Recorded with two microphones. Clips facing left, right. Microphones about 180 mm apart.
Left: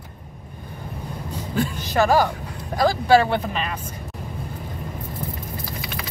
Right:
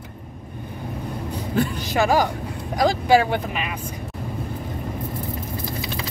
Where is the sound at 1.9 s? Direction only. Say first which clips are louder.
Left 1 dB; 15° right (ahead or behind).